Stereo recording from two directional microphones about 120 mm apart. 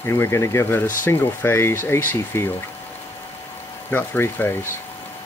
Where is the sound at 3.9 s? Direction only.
15° left (ahead or behind).